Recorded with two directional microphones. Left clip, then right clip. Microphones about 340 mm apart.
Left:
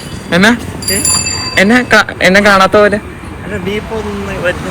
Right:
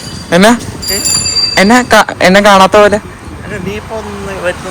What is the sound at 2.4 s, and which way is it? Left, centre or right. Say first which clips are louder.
Speech: right 3 dB; right.